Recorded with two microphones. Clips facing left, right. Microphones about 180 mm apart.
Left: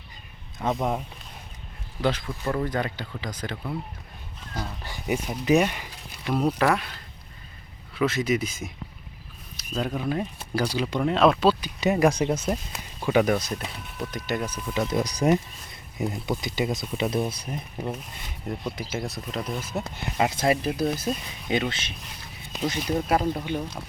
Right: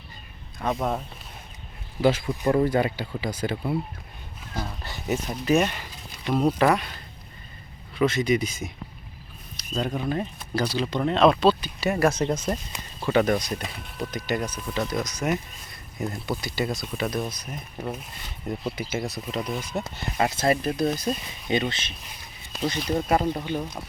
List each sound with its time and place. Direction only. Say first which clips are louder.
0.8 s speech: right 1 dB; 15° left (ahead or behind)
2.0 s speech: right 4 dB; 10° right (ahead or behind)
4.8 s speech: left 1 dB; 10° left (ahead or behind)
13.3 s speech: even; centre (ahead or behind)
14.5 s speech: left 1 dB; 10° left (ahead or behind)
14.8 s speech: left 7 dB; 30° left (ahead or behind)
16.0 s speech: left 1 dB; 15° left (ahead or behind)
18.4 s speech: right 2 dB; centre (ahead or behind)